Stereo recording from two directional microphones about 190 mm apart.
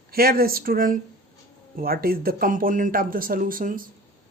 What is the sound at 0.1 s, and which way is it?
Speech, 50° right (ahead or behind).